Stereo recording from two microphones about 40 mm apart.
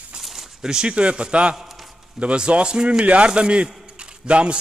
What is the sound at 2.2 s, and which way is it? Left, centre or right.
A man's voice, right.